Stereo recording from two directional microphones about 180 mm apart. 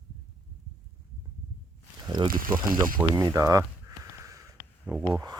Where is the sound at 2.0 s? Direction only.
25° right (ahead or behind).